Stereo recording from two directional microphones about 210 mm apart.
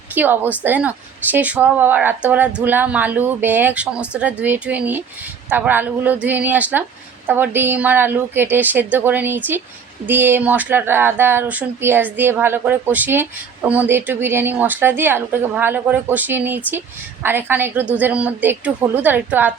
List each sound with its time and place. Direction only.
0.1 s speech: 10° right (ahead or behind)